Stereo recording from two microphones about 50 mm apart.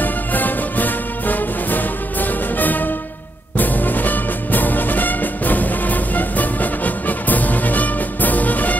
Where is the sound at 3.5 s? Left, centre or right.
Left.